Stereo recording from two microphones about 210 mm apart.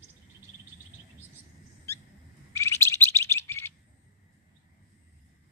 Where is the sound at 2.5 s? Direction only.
15° left (ahead or behind).